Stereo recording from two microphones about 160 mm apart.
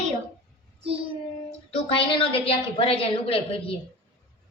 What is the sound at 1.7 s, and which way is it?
A woman's voice, 35° left (ahead or behind).